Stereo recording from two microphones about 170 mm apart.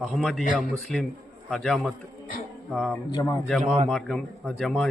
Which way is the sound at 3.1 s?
20° left (ahead or behind).